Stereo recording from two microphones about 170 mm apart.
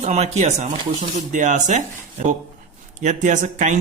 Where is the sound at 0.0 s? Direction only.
40° right (ahead or behind).